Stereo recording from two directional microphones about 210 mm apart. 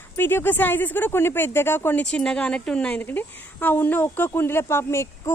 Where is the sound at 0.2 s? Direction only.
10° left (ahead or behind).